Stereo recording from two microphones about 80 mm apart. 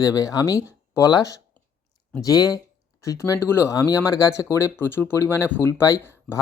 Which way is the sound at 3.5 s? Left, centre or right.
Left.